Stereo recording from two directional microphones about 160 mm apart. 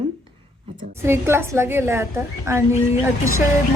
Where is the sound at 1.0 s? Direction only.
15° right (ahead or behind).